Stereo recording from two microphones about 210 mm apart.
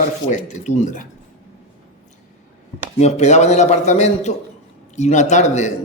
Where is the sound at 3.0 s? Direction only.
30° left (ahead or behind).